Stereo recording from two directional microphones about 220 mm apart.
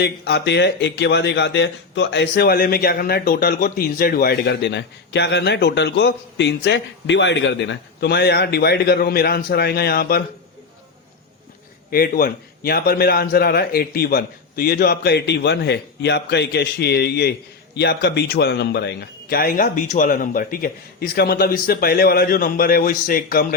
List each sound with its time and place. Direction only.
0.0 s speech: 50° left (ahead or behind)
11.9 s speech: 40° left (ahead or behind)